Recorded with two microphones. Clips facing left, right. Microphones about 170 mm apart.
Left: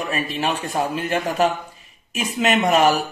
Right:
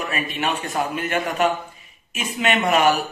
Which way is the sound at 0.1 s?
35° left (ahead or behind).